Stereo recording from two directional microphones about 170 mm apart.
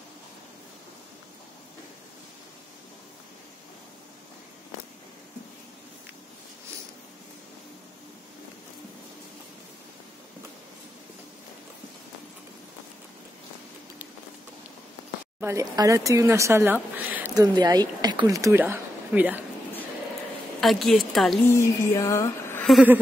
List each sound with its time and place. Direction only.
15.4 s speech: 20° right (ahead or behind)
17.3 s speech: 20° right (ahead or behind)
20.6 s a woman's voice: centre (ahead or behind)
21.5 s a sound: 15° left (ahead or behind)